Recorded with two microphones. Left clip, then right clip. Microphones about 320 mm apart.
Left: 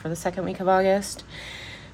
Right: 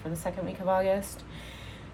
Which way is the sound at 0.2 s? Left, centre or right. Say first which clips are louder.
Left 6 dB; left.